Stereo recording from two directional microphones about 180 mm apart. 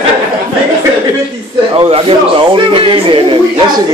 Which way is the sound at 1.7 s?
30° right (ahead or behind).